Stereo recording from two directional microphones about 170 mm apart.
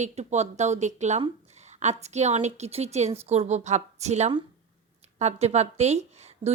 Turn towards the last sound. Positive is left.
turn(degrees=-40)  # may be behind; listen again after turning